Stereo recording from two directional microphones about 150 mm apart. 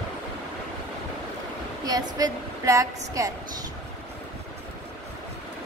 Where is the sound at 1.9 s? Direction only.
25° right (ahead or behind).